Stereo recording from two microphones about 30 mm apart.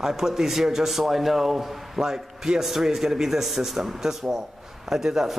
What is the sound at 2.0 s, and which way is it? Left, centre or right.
A man's voice, centre.